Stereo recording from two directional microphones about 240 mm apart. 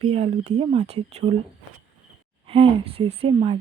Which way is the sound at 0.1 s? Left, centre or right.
Right.